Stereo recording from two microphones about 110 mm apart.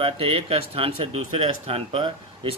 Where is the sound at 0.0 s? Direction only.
65° right (ahead or behind).